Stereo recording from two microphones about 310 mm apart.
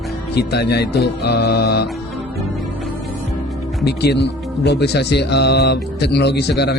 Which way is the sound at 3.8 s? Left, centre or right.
Left.